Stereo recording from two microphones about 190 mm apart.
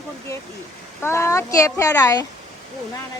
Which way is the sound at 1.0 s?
15° left (ahead or behind).